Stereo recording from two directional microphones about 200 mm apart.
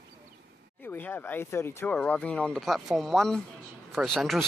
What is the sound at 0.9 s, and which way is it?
A man's voice, 10° left (ahead or behind).